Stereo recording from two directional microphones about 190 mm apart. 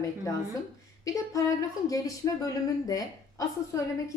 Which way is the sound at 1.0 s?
15° left (ahead or behind).